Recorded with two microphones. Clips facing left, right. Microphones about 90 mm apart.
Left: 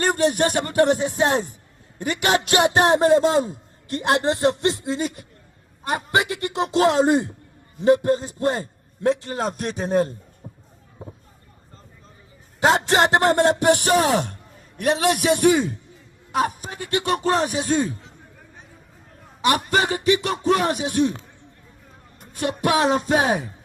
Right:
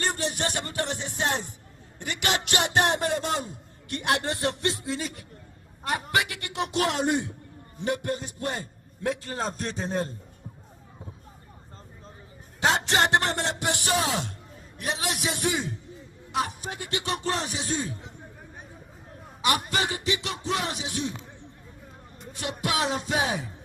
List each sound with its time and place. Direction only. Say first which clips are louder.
0.0 s speech: left 9 dB; 50° left (ahead or behind); by 9.4 s 25° left (ahead or behind)
10.4 s music: left 4 dB; 25° left (ahead or behind)
12.6 s speech: left 6 dB; 30° left (ahead or behind)
13.3 s speech: left 12 dB; 50° left (ahead or behind)
16.3 s speech: left 6 dB; 45° left (ahead or behind)
19.5 s speech: left 6 dB; 45° left (ahead or behind)
22.2 s speech: left 9 dB; 45° left (ahead or behind)